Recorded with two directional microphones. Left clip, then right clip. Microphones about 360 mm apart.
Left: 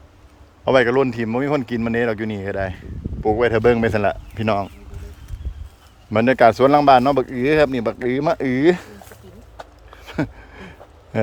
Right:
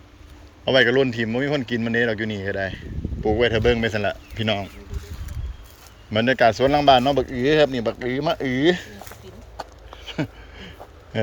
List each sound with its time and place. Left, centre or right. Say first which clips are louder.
0.6 s a man's voice: left 2 dB; centre
6.1 s a man's voice: left 4 dB; centre
10.0 s a sound: left 3 dB; centre